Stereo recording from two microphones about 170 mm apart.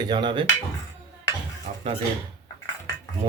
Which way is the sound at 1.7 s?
40° right (ahead or behind).